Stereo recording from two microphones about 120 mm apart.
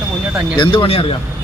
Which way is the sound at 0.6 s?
45° left (ahead or behind).